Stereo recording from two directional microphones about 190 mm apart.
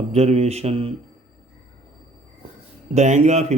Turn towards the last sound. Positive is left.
turn(degrees=-35)  # may be behind; listen again after turning